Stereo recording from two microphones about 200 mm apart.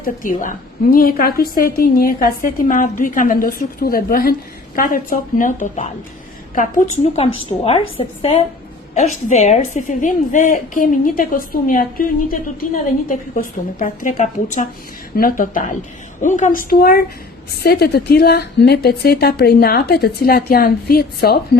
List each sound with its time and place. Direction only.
0.0 s a woman's voice: 40° left (ahead or behind)
7.6 s a woman's voice: 30° left (ahead or behind); by 21.6 s 50° left (ahead or behind)